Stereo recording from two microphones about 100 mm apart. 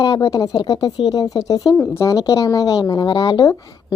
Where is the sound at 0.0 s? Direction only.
40° left (ahead or behind).